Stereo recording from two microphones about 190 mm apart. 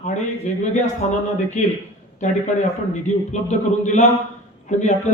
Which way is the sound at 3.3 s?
40° left (ahead or behind).